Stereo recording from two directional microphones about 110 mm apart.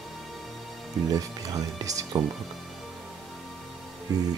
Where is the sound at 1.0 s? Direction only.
35° right (ahead or behind).